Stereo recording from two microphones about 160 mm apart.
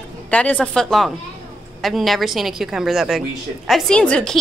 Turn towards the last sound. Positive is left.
turn(degrees=5)  # may be behind; listen again after turning